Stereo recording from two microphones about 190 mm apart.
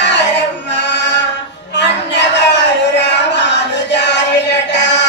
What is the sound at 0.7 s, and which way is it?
Music, 65° left (ahead or behind).